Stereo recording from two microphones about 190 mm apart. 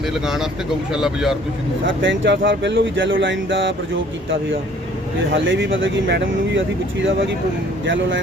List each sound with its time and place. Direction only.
0.1 s speech: centre (ahead or behind)
1.9 s speech: 75° right (ahead or behind)
5.3 s speech: 75° right (ahead or behind)